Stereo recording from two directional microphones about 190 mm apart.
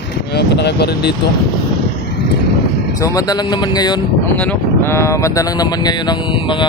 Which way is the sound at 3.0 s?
20° left (ahead or behind).